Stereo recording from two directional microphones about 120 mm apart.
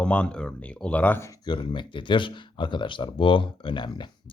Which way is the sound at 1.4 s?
40° left (ahead or behind).